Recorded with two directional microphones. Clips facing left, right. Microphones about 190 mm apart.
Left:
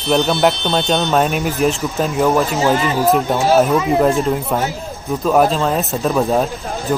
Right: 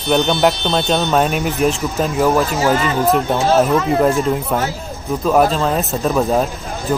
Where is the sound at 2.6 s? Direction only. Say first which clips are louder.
Even; 15° left (ahead or behind).